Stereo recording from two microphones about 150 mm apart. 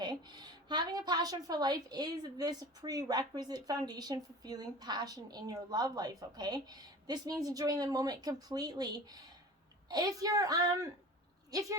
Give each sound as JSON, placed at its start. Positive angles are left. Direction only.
{"t": 0.0, "sound": "a woman's voice", "side_deg": -30}